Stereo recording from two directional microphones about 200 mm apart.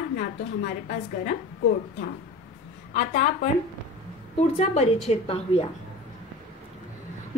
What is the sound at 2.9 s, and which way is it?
Speech, 35° left (ahead or behind).